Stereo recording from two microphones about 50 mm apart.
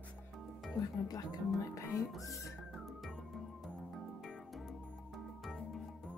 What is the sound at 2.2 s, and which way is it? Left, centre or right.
Speech, left.